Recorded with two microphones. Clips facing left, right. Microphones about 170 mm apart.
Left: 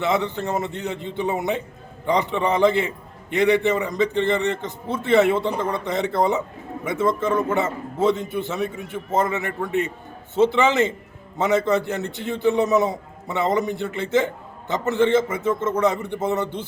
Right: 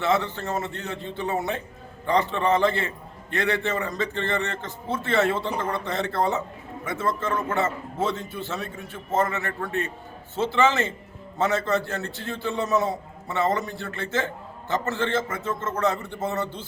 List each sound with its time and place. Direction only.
0.0 s a man's voice: 15° left (ahead or behind)